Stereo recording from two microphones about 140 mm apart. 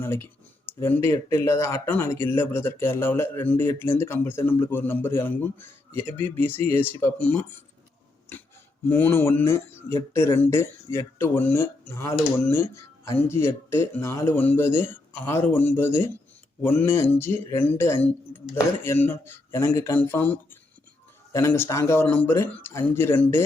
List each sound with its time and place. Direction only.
0.0 s speech: 15° left (ahead or behind)
8.9 s speech: 15° left (ahead or behind)